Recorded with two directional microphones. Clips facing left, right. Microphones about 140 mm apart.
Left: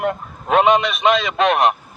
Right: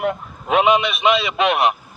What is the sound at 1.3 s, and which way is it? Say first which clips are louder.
Speech: left 2 dB; 40° left (ahead or behind).